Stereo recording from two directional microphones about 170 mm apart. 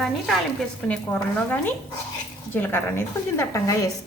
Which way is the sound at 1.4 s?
10° left (ahead or behind).